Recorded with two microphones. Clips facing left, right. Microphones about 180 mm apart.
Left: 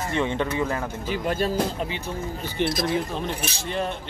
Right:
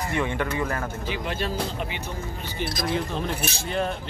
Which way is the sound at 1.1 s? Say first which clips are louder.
Left 6 dB; 45° left (ahead or behind).